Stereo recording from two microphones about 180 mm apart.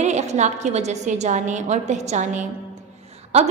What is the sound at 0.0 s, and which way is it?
A woman's voice, 40° right (ahead or behind).